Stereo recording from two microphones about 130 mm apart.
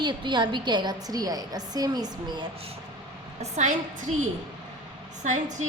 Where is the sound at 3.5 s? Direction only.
65° right (ahead or behind).